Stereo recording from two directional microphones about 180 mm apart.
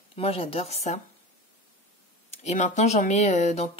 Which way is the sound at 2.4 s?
40° left (ahead or behind).